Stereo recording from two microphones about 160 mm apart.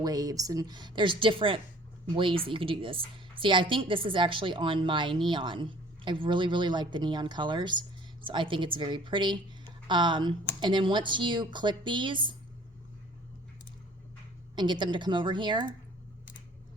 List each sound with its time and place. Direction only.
0.0 s a woman's voice: 25° right (ahead or behind)
14.5 s a woman's voice: 30° right (ahead or behind)